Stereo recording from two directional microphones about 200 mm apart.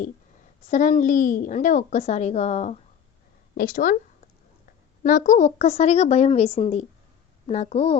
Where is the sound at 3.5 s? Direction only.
45° left (ahead or behind).